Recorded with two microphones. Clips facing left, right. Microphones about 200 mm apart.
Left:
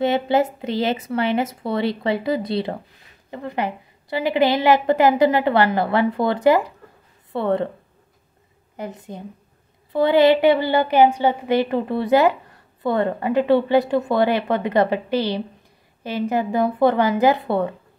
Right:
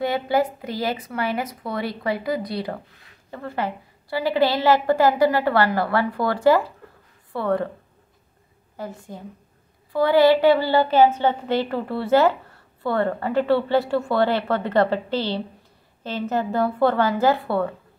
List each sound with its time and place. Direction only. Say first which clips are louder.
0.0 s a woman's voice: left 3 dB; 25° left (ahead or behind)
8.7 s a woman's voice: left 2 dB; 20° left (ahead or behind)